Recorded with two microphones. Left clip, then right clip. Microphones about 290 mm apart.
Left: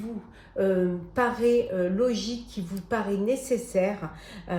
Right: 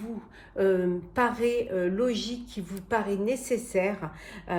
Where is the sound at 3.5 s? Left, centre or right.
Right.